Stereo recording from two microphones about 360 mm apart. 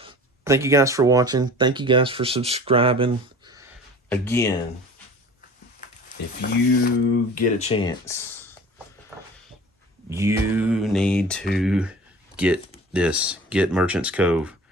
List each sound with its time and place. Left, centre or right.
0.0 s speech: centre
4.1 s speech: centre
6.4 s livestock: left
7.3 s speech: centre
10.1 s speech: centre